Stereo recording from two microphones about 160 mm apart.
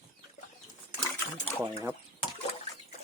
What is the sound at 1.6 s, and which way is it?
Speech, 20° right (ahead or behind).